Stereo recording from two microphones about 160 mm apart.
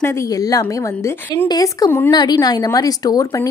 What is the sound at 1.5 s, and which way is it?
Speech, 20° left (ahead or behind).